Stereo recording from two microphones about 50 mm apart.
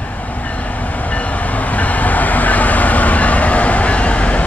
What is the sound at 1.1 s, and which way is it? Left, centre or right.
Train, left.